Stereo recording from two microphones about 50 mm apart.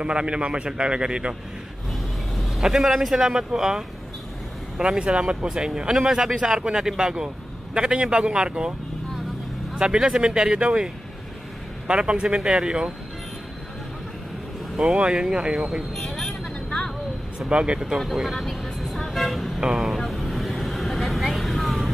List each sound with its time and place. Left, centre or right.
0.0 s a man's voice: centre
1.9 s a man's voice: centre
9.8 s speech: centre
11.9 s a man's voice: centre
14.8 s speech: centre
15.9 s vehicle: centre
17.5 s a man's voice: right
17.9 s vehicle: centre
19.6 s speech: centre
20.0 s vehicle: centre